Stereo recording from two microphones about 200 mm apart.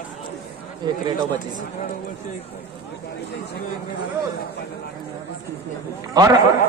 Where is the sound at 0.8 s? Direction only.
20° right (ahead or behind).